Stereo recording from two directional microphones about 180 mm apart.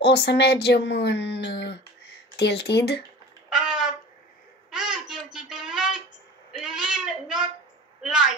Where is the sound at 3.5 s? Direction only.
5° right (ahead or behind).